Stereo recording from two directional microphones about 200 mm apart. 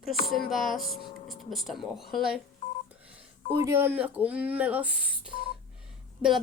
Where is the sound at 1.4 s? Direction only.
Centre (ahead or behind).